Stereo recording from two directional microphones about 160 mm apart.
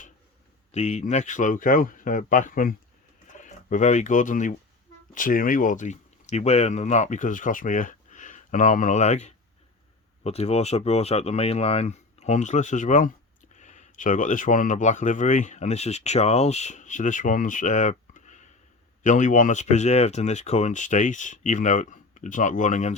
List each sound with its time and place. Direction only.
0.7 s speech: 45° left (ahead or behind)